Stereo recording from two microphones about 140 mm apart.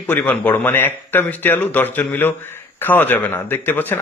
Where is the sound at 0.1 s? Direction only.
10° left (ahead or behind).